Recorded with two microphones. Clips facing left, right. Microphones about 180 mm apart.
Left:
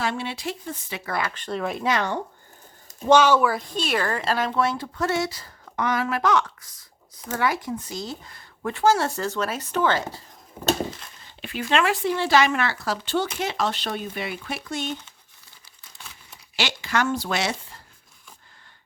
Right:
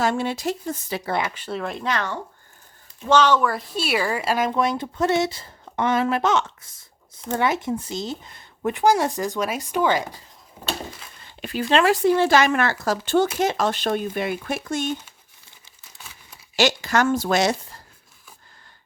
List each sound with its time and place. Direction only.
0.0 s speech: 45° right (ahead or behind)
1.3 s speech: 5° right (ahead or behind)
11.4 s speech: 35° right (ahead or behind)
16.6 s speech: 40° right (ahead or behind)